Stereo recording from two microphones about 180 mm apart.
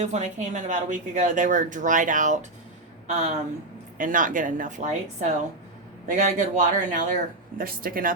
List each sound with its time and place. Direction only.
0.0 s a woman's voice: 40° right (ahead or behind)